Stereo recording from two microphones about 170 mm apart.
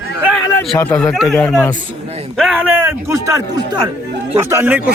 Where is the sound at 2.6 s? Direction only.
10° right (ahead or behind).